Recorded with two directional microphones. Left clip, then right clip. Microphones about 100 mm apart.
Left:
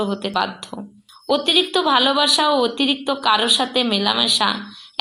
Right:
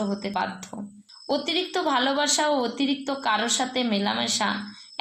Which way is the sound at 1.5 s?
20° left (ahead or behind).